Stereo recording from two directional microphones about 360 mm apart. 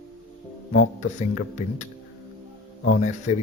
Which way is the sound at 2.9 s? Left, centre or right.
Left.